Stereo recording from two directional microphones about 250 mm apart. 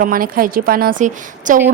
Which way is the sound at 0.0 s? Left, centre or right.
Right.